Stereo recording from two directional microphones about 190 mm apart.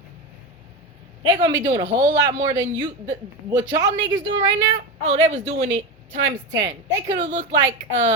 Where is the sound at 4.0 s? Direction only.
80° right.